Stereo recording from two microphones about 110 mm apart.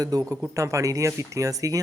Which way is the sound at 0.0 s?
35° right (ahead or behind).